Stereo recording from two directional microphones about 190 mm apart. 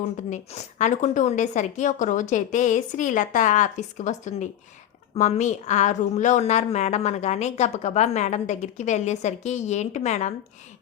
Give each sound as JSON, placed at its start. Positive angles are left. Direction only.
{"t": 0.3, "sound": "speech", "side_deg": 40}